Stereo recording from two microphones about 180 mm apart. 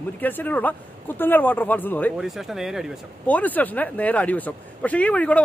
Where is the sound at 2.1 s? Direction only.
Centre (ahead or behind).